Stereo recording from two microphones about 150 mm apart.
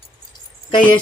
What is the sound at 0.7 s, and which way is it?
Speech, 30° left (ahead or behind).